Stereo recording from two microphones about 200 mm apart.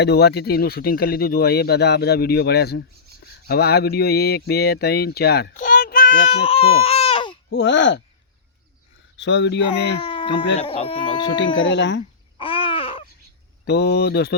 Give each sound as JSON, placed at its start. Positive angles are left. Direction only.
{"t": 0.0, "sound": "speech", "side_deg": 55}
{"t": 6.3, "sound": "speech", "side_deg": 30}
{"t": 7.5, "sound": "speech", "side_deg": 60}
{"t": 9.1, "sound": "speech", "side_deg": 60}
{"t": 10.0, "sound": "a sound", "side_deg": 25}
{"t": 10.7, "sound": "speech", "side_deg": 25}
{"t": 11.5, "sound": "speech", "side_deg": 65}
{"t": 12.4, "sound": "babbling", "side_deg": 25}
{"t": 13.7, "sound": "speech", "side_deg": 55}